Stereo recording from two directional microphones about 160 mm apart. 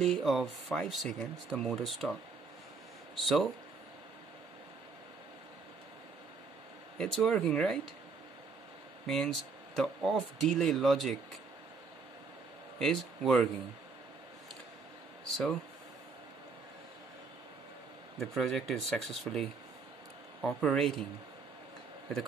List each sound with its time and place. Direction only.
0.0 s speech: centre (ahead or behind)
3.2 s speech: centre (ahead or behind)
7.0 s speech: 5° left (ahead or behind)
9.0 s speech: centre (ahead or behind)
12.7 s speech: centre (ahead or behind)
18.2 s speech: centre (ahead or behind)